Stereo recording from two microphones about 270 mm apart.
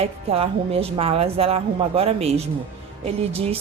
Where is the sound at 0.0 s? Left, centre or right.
Right.